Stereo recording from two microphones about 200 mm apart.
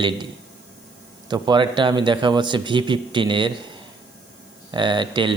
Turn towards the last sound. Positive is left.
turn(degrees=-25)  # may be behind; listen again after turning